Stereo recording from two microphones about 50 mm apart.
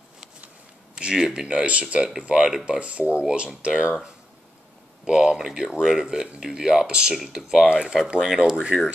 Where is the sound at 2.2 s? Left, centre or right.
Centre.